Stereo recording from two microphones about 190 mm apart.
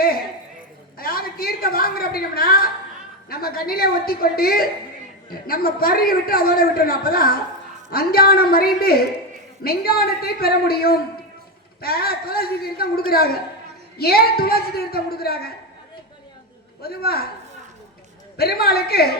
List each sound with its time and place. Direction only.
0.9 s a sound: 50° left (ahead or behind)
3.2 s a man's voice: 50° left (ahead or behind)
16.8 s a man's voice: 55° left (ahead or behind)
18.3 s a man's voice: 55° left (ahead or behind)